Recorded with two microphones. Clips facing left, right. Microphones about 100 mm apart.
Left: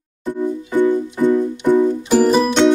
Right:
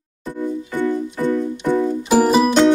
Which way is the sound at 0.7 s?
15° left (ahead or behind).